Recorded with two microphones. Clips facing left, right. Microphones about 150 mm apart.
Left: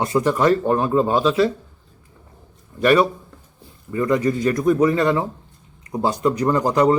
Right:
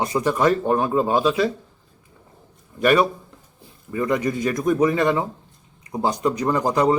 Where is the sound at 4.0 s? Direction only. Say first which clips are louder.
Left 3 dB; 20° right (ahead or behind).